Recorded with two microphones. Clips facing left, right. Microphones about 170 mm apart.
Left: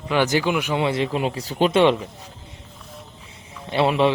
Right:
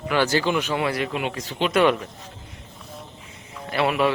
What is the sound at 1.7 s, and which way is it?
Speech, 25° left (ahead or behind).